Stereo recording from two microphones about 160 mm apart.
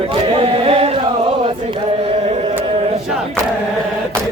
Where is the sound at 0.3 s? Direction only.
40° right (ahead or behind).